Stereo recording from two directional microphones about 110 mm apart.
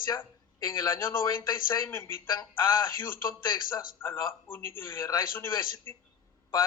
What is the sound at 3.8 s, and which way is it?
A man's voice, 20° left (ahead or behind).